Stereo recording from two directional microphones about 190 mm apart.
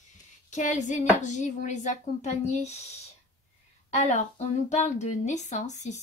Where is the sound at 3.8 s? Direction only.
35° left (ahead or behind).